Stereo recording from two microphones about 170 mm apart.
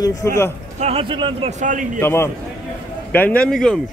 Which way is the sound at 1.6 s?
50° right (ahead or behind).